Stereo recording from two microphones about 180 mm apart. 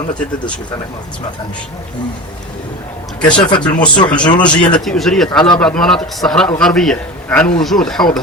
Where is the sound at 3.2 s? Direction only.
25° left (ahead or behind).